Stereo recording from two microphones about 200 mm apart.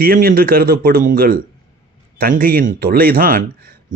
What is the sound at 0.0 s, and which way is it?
Speech, 45° right (ahead or behind).